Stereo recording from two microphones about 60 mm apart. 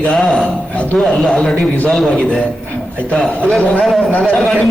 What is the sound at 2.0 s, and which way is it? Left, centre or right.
A man's voice, centre.